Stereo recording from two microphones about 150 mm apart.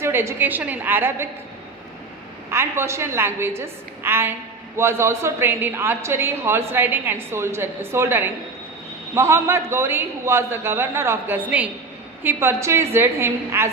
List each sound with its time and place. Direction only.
0.0 s a woman's voice: 15° right (ahead or behind)
2.5 s a woman's voice: 15° right (ahead or behind)